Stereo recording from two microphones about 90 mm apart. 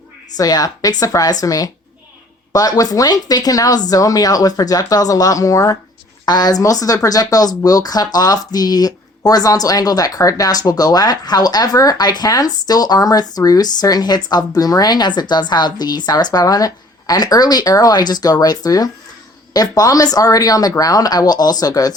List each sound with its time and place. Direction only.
0.3 s speech: 45° left (ahead or behind)